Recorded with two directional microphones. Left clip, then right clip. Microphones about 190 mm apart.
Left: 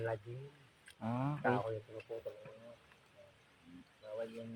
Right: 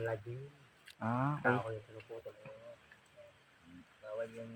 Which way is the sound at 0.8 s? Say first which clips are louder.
Right 4 dB; 15° right (ahead or behind).